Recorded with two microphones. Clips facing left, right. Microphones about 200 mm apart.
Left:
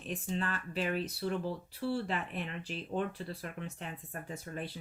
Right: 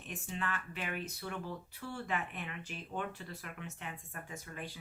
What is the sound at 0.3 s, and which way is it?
Speech, 35° left (ahead or behind).